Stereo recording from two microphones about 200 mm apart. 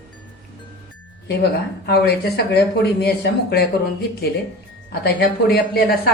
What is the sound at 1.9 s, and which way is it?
A woman's voice, 55° left (ahead or behind).